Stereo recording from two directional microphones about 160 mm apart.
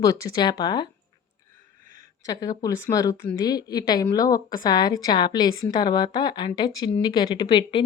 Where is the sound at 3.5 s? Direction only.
25° left (ahead or behind).